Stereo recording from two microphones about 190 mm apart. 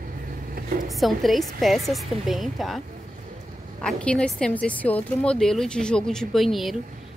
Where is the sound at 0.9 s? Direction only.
Centre (ahead or behind).